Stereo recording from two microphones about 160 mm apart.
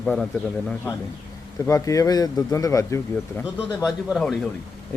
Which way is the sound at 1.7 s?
20° left (ahead or behind).